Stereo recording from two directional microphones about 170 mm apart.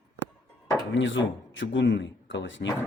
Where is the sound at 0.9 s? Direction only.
90° left.